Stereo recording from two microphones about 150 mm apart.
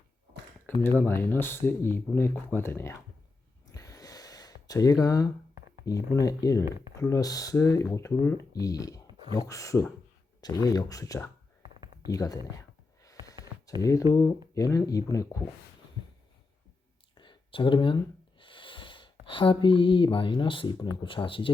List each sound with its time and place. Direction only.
0.7 s speech: 15° left (ahead or behind)
3.7 s gasp: 20° left (ahead or behind)
5.8 s speech: 25° left (ahead or behind)
12.1 s a sound: 25° left (ahead or behind)
13.8 s speech: 20° left (ahead or behind)
17.2 s snort: 35° left (ahead or behind)
19.2 s speech: 35° left (ahead or behind)